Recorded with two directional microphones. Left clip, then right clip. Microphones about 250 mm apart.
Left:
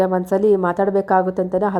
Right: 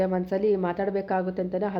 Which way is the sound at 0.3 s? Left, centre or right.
Centre.